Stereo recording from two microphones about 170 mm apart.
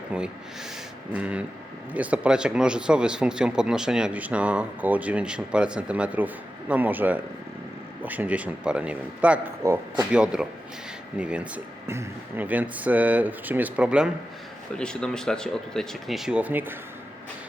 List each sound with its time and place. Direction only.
0.1 s speech: 10° right (ahead or behind)